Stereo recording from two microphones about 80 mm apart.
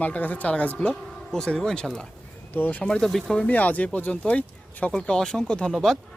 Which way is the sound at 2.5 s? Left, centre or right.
Left.